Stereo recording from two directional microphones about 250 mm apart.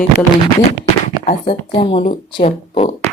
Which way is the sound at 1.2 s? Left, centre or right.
Left.